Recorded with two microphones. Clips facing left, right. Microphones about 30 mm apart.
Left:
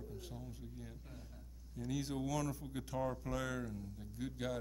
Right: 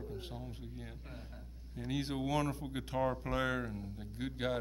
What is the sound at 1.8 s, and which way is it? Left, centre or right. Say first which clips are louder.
Speech: right 3 dB; right.